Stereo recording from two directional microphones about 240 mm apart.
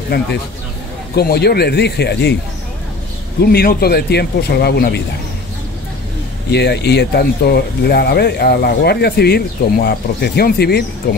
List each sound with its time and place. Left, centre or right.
1.1 s speech: left
3.5 s speech: left
6.5 s speech: left